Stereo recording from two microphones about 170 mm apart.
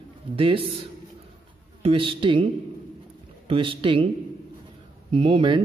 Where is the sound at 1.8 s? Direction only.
30° right (ahead or behind).